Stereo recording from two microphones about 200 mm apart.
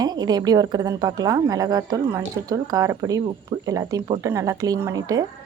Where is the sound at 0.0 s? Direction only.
20° right (ahead or behind).